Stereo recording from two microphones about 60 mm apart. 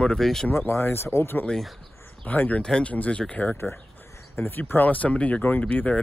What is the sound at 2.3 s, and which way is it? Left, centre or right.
Speech, left.